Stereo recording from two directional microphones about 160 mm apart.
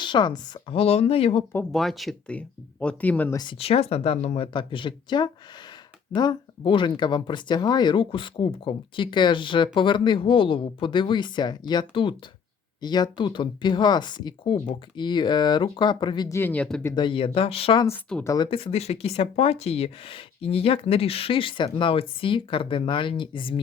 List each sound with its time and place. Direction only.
0.0 s speech: 30° left (ahead or behind)
1.7 s speech: centre (ahead or behind)
3.6 s speech: 40° left (ahead or behind)
16.4 s speech: 10° left (ahead or behind)
16.8 s speech: 25° left (ahead or behind)
18.2 s speech: 20° left (ahead or behind)
18.5 s speech: 40° left (ahead or behind)